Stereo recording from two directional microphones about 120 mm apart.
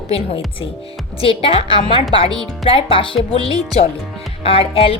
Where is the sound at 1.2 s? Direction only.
50° left (ahead or behind).